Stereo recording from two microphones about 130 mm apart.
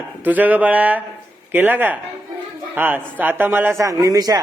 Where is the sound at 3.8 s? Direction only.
25° right (ahead or behind).